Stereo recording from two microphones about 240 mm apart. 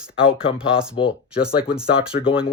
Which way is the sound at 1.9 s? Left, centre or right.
Left.